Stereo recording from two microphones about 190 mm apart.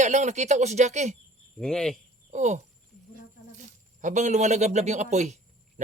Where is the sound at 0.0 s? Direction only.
40° right (ahead or behind).